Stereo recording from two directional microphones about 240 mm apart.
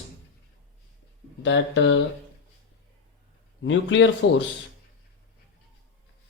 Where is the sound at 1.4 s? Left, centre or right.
Left.